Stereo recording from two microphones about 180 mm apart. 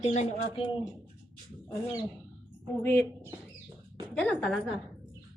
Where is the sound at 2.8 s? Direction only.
15° left (ahead or behind).